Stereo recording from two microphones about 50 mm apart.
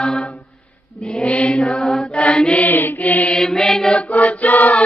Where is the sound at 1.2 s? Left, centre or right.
Left.